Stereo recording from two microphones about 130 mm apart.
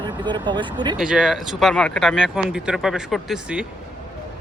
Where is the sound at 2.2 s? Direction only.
5° right (ahead or behind).